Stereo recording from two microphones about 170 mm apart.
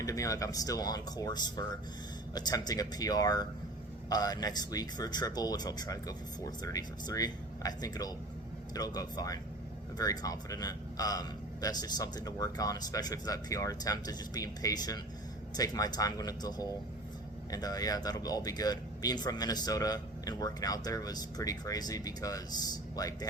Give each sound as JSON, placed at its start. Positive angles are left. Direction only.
{"t": 0.0, "sound": "speech", "side_deg": 20}